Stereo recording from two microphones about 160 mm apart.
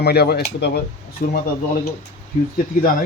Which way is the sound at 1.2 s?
65° left (ahead or behind).